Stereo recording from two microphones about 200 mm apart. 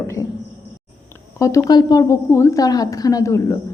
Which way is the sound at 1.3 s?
15° left (ahead or behind).